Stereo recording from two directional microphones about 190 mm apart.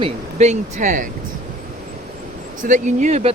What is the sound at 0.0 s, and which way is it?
Speech, 35° right (ahead or behind).